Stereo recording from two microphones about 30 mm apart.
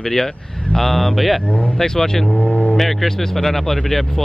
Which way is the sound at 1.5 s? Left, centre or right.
Left.